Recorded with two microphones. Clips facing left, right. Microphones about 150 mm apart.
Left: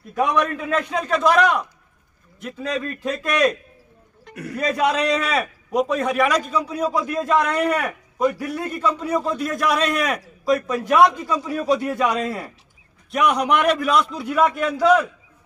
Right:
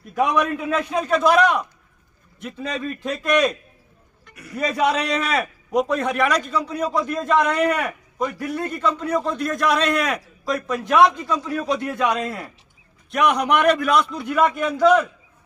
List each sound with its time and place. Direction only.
0.1 s a man's voice: 5° right (ahead or behind)
4.2 s music: 90° left
4.6 s a man's voice: centre (ahead or behind)